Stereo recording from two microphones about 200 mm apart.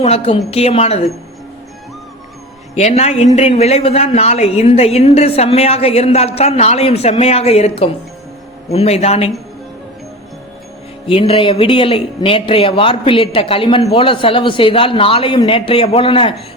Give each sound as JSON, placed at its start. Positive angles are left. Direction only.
{"t": 0.0, "sound": "a woman's voice", "side_deg": 30}
{"t": 2.7, "sound": "a woman's voice", "side_deg": 35}
{"t": 11.1, "sound": "speech", "side_deg": 30}